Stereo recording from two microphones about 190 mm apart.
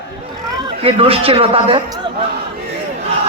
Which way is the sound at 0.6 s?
25° right (ahead or behind).